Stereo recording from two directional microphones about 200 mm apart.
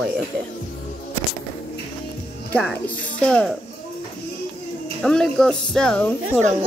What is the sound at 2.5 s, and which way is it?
A woman's voice, 5° left (ahead or behind).